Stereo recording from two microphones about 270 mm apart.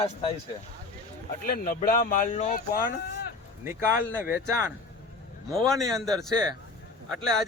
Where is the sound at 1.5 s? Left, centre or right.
Left.